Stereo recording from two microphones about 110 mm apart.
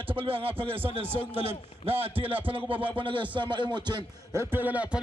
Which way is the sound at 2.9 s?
50° right (ahead or behind).